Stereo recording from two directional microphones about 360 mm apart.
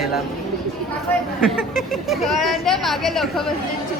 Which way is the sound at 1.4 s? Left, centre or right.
Centre.